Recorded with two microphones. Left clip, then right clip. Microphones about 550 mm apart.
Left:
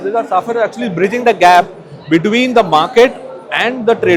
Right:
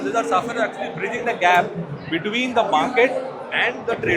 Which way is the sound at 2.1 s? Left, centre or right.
Left.